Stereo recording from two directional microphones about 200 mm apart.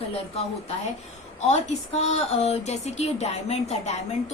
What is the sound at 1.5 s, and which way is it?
A woman's voice, 30° left (ahead or behind).